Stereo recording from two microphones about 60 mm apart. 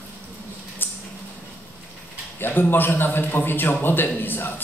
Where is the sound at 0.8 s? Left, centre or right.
Left.